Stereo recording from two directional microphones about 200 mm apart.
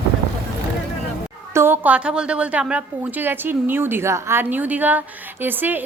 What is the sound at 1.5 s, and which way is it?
A woman's voice, 10° right (ahead or behind).